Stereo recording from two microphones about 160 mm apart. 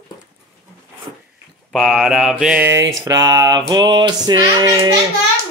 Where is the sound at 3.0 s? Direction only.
25° right (ahead or behind).